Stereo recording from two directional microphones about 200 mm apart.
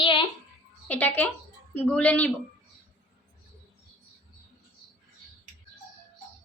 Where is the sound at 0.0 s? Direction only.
25° left (ahead or behind).